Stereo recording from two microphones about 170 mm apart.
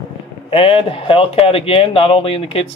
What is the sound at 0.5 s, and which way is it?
Speech, 30° left (ahead or behind).